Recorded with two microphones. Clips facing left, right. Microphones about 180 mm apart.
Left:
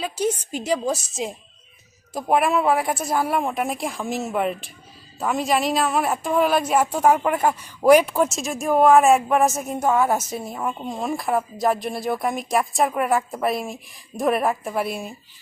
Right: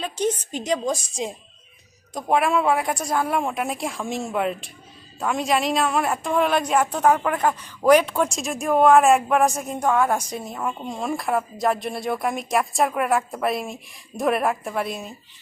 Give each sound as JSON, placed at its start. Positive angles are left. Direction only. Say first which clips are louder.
{"t": 0.0, "sound": "a woman's voice", "louder": "even", "side_deg": 10}